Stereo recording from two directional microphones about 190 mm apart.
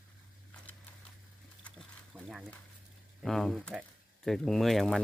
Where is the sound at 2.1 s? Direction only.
10° right (ahead or behind).